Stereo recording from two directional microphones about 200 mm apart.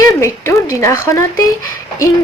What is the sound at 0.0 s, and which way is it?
Speech, 15° left (ahead or behind).